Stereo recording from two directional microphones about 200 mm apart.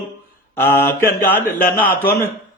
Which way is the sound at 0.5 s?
10° left (ahead or behind).